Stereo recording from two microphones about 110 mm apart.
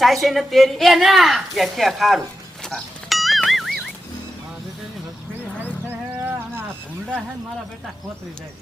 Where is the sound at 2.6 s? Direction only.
Centre (ahead or behind).